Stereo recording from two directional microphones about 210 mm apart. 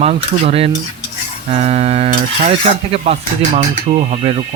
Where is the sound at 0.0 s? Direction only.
30° right (ahead or behind).